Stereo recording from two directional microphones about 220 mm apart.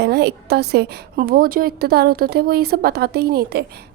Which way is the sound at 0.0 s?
50° right (ahead or behind).